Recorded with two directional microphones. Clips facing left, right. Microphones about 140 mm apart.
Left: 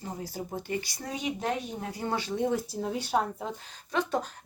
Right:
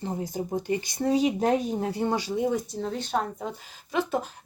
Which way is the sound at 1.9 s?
25° right (ahead or behind).